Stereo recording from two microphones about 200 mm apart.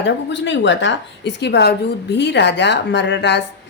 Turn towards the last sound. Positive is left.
turn(degrees=60)  # may be behind; listen again after turning